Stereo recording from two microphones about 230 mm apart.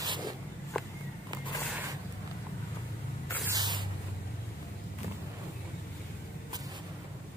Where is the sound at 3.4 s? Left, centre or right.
Centre.